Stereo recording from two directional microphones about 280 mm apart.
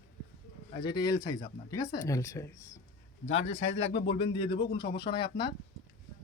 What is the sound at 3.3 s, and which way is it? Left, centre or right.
Speech, left.